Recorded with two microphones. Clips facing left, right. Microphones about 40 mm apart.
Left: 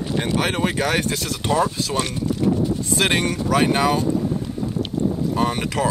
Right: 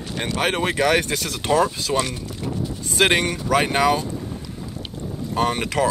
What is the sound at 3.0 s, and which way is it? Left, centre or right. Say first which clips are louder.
Speech: right 3 dB; centre.